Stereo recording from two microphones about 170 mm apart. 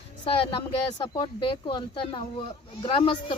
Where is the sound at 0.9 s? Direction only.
25° left (ahead or behind).